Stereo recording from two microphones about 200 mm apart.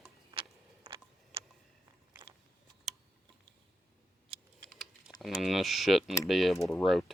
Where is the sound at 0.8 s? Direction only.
25° right (ahead or behind).